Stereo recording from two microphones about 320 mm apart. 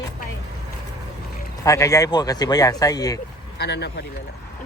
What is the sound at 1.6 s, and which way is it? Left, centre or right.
Speech, centre.